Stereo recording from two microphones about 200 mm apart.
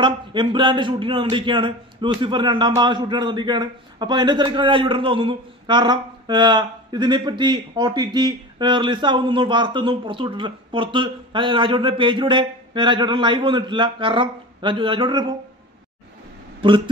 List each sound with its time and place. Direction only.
0.0 s speech: 25° right (ahead or behind)